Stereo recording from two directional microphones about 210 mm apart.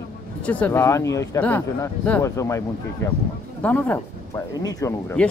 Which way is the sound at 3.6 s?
5° left (ahead or behind).